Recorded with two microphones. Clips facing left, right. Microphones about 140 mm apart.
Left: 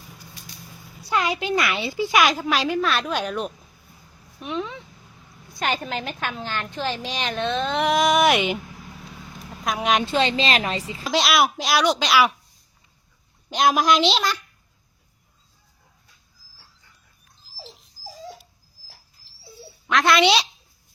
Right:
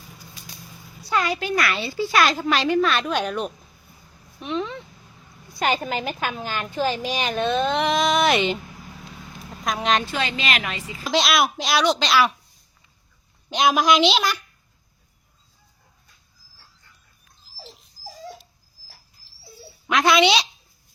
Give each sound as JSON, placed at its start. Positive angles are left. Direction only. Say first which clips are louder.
{"t": 1.0, "sound": "a woman's voice", "louder": "even", "side_deg": 15}
{"t": 9.4, "sound": "vehicle", "louder": "even", "side_deg": 5}
{"t": 10.1, "sound": "a woman's voice", "louder": "left 4 dB", "side_deg": 30}
{"t": 11.1, "sound": "a woman's voice", "louder": "even", "side_deg": 5}
{"t": 13.5, "sound": "a woman's voice", "louder": "even", "side_deg": 0}
{"t": 19.9, "sound": "a woman's voice", "louder": "even", "side_deg": 0}